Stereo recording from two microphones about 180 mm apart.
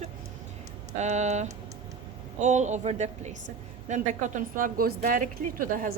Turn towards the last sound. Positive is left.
turn(degrees=-50)  # may be behind; listen again after turning